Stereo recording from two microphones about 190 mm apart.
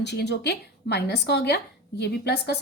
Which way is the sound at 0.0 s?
65° left (ahead or behind).